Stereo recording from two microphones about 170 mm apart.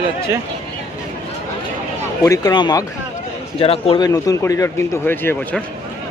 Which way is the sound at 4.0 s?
20° left (ahead or behind).